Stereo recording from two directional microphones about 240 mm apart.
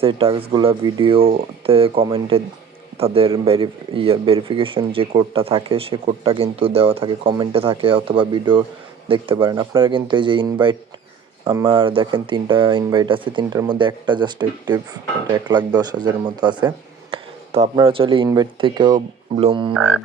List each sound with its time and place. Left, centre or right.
0.0 s speech: right
19.7 s music: centre